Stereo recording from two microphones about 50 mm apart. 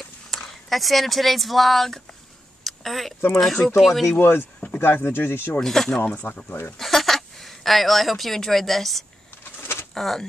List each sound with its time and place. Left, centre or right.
0.3 s speech: centre
2.6 s a sound: centre
3.3 s speech: centre
4.2 s speech: left
5.6 s speech: centre
6.2 s speech: left
6.8 s speech: centre
9.6 s bird: left
9.9 s speech: centre